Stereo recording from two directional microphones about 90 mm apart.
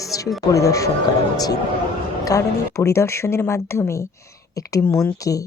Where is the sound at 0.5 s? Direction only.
35° left (ahead or behind).